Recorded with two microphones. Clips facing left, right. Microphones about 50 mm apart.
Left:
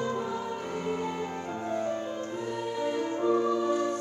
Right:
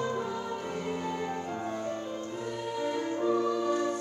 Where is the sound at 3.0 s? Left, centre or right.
Centre.